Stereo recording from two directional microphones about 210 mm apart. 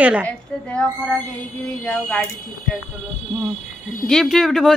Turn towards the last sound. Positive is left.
turn(degrees=0)  # may be behind; listen again after turning